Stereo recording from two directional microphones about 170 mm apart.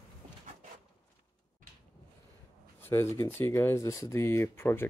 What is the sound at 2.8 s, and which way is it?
Speech, 15° left (ahead or behind).